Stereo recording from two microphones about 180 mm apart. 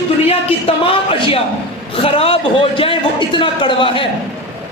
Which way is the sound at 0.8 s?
30° left (ahead or behind).